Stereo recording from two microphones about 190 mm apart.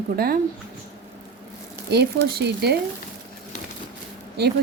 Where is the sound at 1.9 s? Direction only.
60° right (ahead or behind).